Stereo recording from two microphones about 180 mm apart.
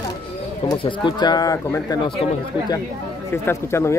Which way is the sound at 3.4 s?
15° left (ahead or behind).